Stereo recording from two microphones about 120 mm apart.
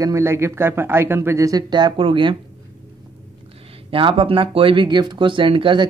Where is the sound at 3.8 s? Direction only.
45° right (ahead or behind).